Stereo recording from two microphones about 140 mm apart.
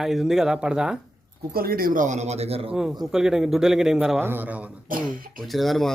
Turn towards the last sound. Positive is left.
turn(degrees=0)  # may be behind; listen again after turning